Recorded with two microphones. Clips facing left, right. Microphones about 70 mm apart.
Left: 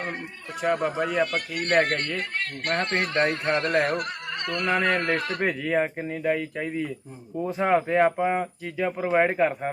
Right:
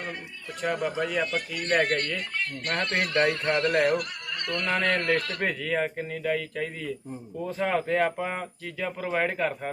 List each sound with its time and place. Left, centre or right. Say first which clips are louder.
0.9 s a man's voice: left 2 dB; centre
1.2 s speech: left 3 dB; left
2.0 s speech: left 1 dB; left
2.3 s speech: left 2 dB; left
2.7 s speech: left 1 dB; left
4.4 s speech: left 2 dB; left